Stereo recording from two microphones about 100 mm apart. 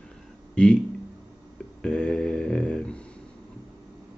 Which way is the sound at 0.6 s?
10° left (ahead or behind).